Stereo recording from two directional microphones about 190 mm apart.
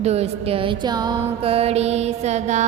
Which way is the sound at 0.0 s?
35° right (ahead or behind).